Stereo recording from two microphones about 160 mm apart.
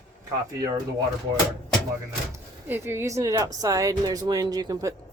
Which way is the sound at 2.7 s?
15° right (ahead or behind).